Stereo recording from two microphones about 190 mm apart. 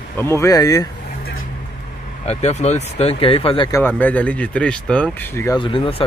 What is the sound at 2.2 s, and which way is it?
Speech, 35° left (ahead or behind).